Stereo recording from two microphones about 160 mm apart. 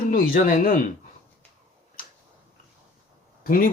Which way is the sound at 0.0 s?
60° left (ahead or behind).